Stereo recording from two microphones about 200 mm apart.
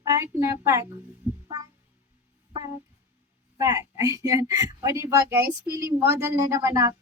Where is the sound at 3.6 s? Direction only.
15° right (ahead or behind).